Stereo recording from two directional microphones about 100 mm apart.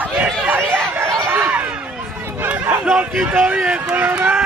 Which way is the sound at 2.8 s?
5° right (ahead or behind).